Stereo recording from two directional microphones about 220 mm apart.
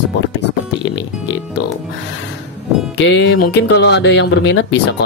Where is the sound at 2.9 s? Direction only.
60° left (ahead or behind).